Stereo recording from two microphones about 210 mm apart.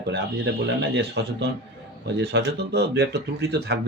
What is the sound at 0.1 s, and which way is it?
Speech, 55° right (ahead or behind).